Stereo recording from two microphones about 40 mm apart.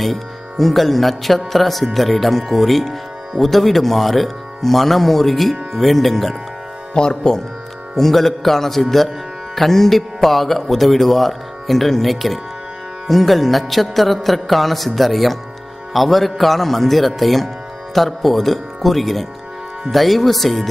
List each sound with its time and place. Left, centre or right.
0.0 s music: centre
2.0 s speech: centre
6.9 s speech: centre